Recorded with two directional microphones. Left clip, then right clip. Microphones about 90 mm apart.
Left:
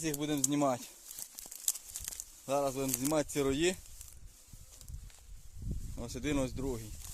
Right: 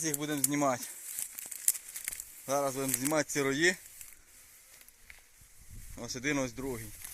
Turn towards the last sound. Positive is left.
turn(degrees=15)  # may be behind; listen again after turning